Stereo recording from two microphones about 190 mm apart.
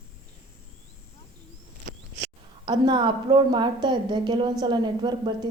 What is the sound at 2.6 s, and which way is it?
A woman's voice, 25° right (ahead or behind).